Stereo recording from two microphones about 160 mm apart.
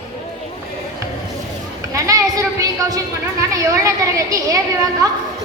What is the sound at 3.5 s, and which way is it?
A woman's voice, 20° right (ahead or behind).